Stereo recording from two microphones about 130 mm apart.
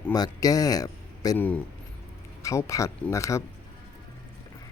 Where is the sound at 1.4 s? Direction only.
10° left (ahead or behind).